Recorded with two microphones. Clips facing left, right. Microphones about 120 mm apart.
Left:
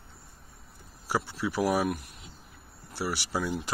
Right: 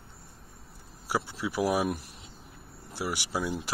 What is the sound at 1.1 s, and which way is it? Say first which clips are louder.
Speech: left 1 dB; 15° right (ahead or behind).